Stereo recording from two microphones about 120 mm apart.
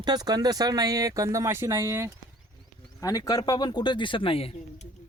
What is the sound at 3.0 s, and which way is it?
Speech, 30° left (ahead or behind).